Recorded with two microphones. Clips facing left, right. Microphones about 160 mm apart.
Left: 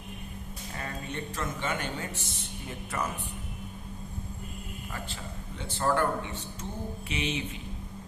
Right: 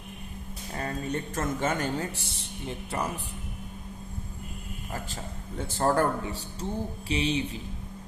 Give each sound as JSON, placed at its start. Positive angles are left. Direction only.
{"t": 0.8, "sound": "speech", "side_deg": -40}
{"t": 5.5, "sound": "speech", "side_deg": -45}